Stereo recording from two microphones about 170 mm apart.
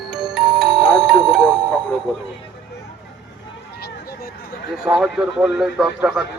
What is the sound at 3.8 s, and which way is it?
Run, 70° left (ahead or behind).